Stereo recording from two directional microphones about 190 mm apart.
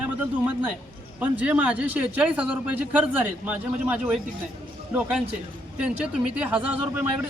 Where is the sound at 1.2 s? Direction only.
10° right (ahead or behind).